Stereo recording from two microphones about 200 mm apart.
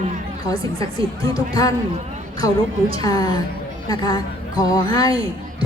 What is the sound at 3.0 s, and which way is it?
A woman's voice, 20° left (ahead or behind).